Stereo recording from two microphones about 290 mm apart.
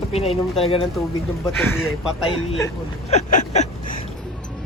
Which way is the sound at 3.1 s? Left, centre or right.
Left.